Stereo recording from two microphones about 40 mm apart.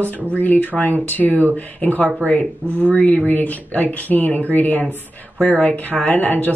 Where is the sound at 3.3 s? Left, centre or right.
Left.